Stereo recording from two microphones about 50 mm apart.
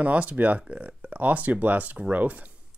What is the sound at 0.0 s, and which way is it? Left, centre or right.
Speech, right.